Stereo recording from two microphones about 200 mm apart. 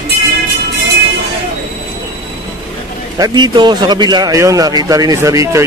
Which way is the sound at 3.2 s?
20° right (ahead or behind).